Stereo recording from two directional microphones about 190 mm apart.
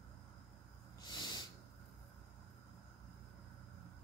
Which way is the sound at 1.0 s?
20° left (ahead or behind).